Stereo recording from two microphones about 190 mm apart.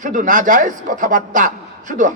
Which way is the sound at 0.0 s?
45° right (ahead or behind).